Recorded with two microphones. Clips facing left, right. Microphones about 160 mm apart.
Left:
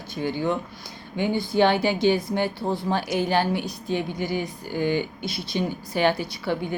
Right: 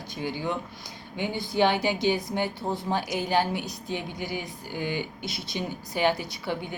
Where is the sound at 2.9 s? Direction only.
20° right (ahead or behind).